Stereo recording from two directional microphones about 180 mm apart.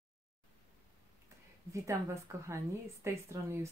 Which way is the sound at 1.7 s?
15° right (ahead or behind).